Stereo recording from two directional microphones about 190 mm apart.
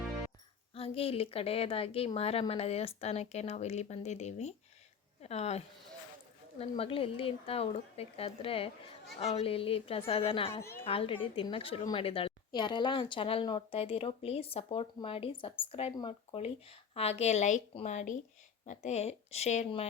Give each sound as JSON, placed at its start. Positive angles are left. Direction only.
{"t": 0.7, "sound": "a woman's voice", "side_deg": 30}
{"t": 10.6, "sound": "a woman's voice", "side_deg": 15}
{"t": 10.8, "sound": "a woman's voice", "side_deg": 30}